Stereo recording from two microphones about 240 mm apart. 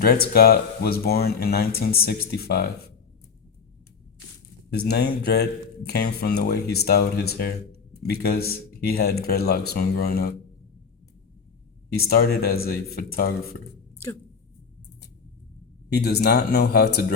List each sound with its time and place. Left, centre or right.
0.0 s speech: left
4.9 s speech: left
12.0 s speech: left
15.9 s speech: left